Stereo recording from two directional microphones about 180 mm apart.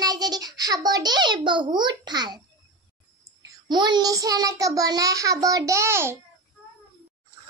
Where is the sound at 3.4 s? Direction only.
25° right (ahead or behind).